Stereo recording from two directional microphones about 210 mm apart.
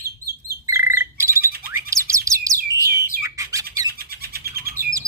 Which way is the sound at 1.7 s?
15° right (ahead or behind).